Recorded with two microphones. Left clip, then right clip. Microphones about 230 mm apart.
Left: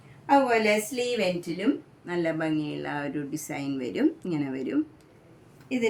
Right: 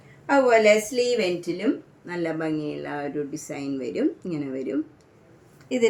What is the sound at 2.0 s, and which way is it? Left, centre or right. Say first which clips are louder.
Speech: even; left.